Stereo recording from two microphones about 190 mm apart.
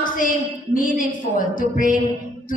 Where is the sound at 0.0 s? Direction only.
45° left (ahead or behind).